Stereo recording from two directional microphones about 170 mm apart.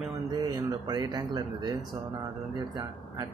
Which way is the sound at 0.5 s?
20° right (ahead or behind).